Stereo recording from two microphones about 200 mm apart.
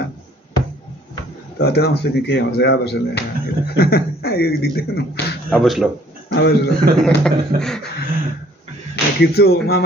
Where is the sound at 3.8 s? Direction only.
50° left (ahead or behind).